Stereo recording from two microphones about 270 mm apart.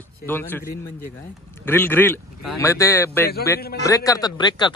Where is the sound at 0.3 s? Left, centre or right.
Centre.